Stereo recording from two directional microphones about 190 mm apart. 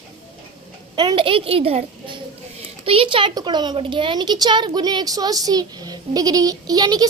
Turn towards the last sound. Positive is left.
turn(degrees=-20)  # may be behind; listen again after turning